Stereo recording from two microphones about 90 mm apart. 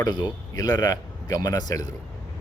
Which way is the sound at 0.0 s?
45° left (ahead or behind).